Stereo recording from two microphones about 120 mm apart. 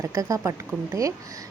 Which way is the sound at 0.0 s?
25° right (ahead or behind).